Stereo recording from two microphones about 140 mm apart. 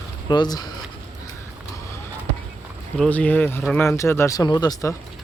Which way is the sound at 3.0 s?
10° left (ahead or behind).